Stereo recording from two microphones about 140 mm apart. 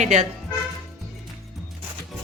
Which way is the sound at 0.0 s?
55° right (ahead or behind).